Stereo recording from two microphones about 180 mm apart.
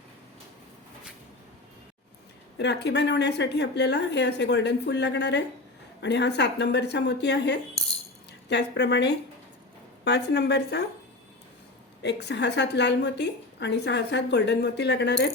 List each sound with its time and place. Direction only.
2.6 s a woman's voice: 70° left (ahead or behind)
12.0 s a woman's voice: 70° left (ahead or behind)